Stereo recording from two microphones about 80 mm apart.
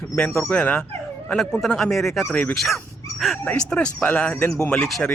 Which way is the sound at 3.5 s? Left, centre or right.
Centre.